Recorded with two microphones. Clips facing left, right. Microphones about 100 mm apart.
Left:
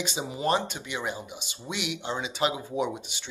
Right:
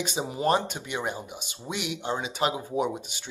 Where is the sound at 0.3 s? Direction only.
45° right (ahead or behind).